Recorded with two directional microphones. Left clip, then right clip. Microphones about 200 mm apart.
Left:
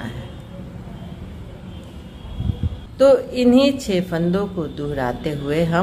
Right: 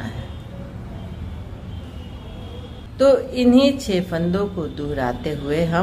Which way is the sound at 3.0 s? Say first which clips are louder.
Left 2 dB; 15° left (ahead or behind).